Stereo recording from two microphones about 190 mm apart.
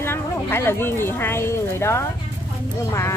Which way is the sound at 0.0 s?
10° left (ahead or behind).